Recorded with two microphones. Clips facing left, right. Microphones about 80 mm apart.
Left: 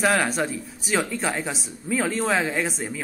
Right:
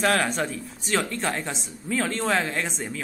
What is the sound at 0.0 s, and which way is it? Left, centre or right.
Speech, centre.